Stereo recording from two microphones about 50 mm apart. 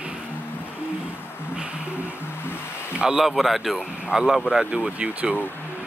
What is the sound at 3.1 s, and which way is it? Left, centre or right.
Speech, centre.